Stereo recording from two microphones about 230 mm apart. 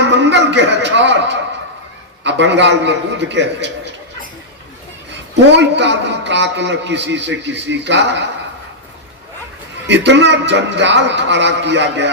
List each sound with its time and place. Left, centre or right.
0.0 s a sound: right
2.2 s a man's voice: right
5.5 s a man's voice: right
9.8 s a man's voice: right